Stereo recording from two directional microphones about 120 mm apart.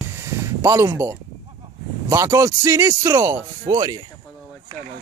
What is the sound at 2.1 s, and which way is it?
Speech, 25° right (ahead or behind).